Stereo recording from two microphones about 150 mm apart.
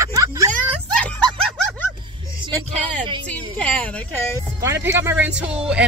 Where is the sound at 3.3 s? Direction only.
10° left (ahead or behind).